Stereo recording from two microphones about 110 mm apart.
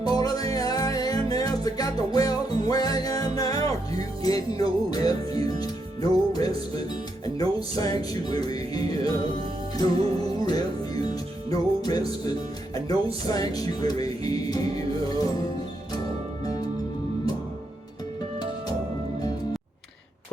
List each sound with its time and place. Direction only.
0.0 s music: 35° left (ahead or behind)